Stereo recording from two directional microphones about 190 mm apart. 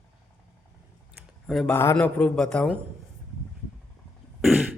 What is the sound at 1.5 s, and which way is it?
Speech, centre (ahead or behind).